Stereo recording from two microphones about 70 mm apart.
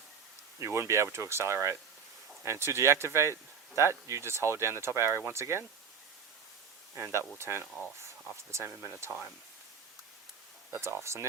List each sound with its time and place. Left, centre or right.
0.6 s speech: right
6.9 s speech: right
10.7 s speech: right